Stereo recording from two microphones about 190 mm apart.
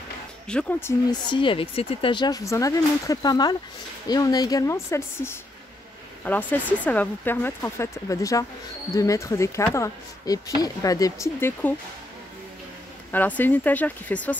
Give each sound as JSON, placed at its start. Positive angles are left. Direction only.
{"t": 0.5, "sound": "speech", "side_deg": 5}
{"t": 1.3, "sound": "speech", "side_deg": 25}
{"t": 13.1, "sound": "speech", "side_deg": 10}